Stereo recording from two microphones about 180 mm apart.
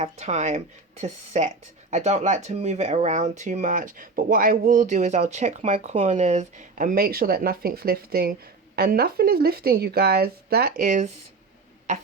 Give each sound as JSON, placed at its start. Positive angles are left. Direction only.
{"t": 0.0, "sound": "speech", "side_deg": -40}